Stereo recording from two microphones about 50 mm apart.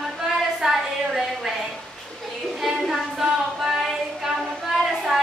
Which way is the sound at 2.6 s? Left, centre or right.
Centre.